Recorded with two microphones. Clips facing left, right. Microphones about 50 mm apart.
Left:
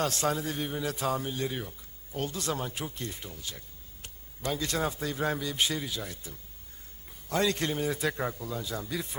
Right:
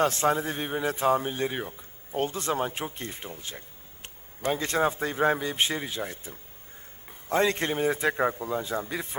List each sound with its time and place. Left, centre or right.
0.0 s speech: right